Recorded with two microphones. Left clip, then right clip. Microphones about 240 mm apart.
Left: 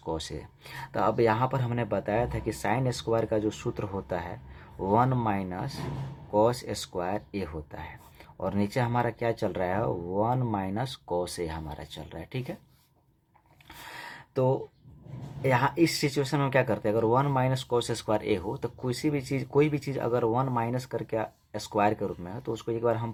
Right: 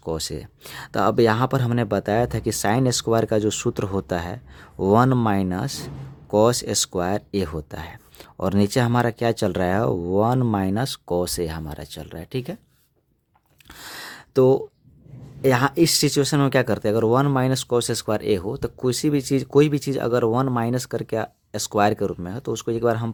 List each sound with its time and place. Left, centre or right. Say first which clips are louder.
0.0 s speech: right 6 dB; right
13.8 s a sound: right 6 dB; right
15.4 s speech: right 6 dB; right